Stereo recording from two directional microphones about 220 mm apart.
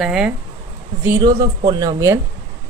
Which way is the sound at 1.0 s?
15° right (ahead or behind).